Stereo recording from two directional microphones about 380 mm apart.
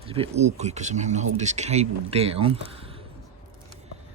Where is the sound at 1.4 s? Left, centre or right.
Centre.